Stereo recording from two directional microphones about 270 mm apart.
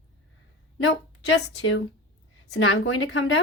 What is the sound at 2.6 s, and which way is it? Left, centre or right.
Speech, left.